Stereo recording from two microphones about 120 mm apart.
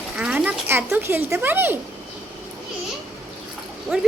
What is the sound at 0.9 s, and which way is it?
Speech, 20° right (ahead or behind).